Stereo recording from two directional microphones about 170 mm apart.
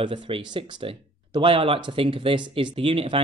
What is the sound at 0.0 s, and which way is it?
Speech, 30° right (ahead or behind).